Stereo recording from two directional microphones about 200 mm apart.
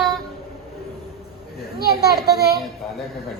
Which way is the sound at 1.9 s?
50° left (ahead or behind).